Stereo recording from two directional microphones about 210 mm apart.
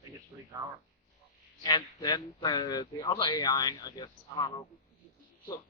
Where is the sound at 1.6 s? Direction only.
20° left (ahead or behind).